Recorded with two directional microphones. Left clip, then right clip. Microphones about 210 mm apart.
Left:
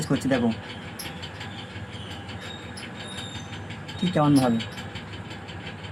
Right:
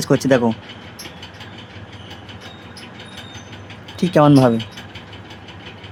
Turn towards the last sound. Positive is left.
turn(degrees=-45)  # may be behind; listen again after turning